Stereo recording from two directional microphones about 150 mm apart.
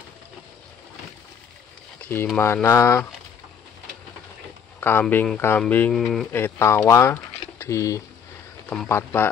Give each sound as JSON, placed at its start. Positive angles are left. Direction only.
{"t": 2.3, "sound": "speech", "side_deg": 15}
{"t": 4.7, "sound": "a sound", "side_deg": 15}
{"t": 5.0, "sound": "speech", "side_deg": 5}
{"t": 6.3, "sound": "speech", "side_deg": 15}